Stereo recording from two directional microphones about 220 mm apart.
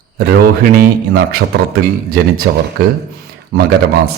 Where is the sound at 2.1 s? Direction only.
45° right (ahead or behind).